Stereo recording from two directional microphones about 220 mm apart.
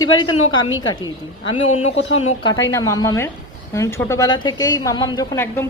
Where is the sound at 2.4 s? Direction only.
15° left (ahead or behind).